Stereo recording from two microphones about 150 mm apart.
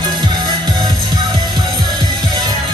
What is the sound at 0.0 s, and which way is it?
Music, 30° right (ahead or behind).